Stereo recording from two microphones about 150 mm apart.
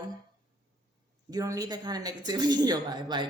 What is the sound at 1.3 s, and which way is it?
Speech, 25° right (ahead or behind).